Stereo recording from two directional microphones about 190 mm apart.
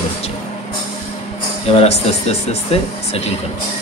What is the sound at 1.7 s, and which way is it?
Speech, 35° left (ahead or behind).